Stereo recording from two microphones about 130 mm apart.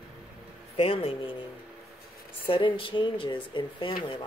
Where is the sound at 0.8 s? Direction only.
45° left (ahead or behind).